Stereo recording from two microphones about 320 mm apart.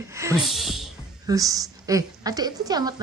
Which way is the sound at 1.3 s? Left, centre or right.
Centre.